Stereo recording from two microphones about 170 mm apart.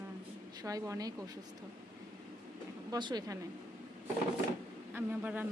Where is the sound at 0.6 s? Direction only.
20° right (ahead or behind).